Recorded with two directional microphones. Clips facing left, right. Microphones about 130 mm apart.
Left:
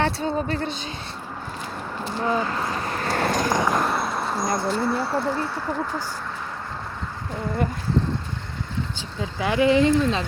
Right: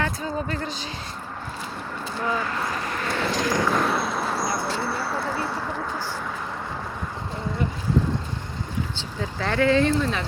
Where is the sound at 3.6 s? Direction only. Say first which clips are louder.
Even; 15° left (ahead or behind).